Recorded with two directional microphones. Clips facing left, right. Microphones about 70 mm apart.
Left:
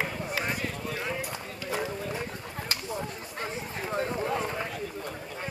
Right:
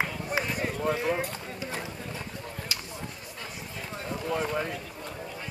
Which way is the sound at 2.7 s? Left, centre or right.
Left.